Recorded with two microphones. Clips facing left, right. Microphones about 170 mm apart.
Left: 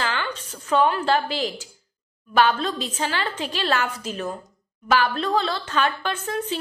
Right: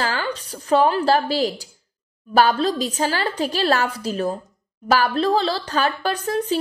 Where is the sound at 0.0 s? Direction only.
35° right (ahead or behind).